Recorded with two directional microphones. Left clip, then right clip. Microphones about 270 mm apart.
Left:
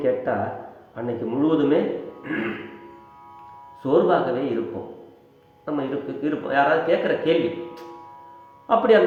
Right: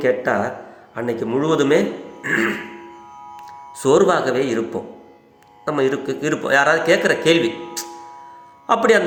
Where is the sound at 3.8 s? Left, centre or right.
Right.